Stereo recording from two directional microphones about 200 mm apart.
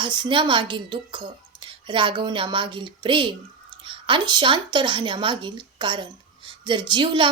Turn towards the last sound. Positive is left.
turn(degrees=-25)  # may be behind; listen again after turning